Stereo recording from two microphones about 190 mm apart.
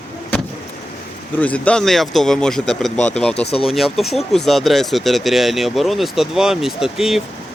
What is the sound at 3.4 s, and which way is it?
Speech, 30° left (ahead or behind).